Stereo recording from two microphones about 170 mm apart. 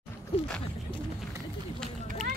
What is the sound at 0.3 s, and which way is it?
Speech, 35° left (ahead or behind).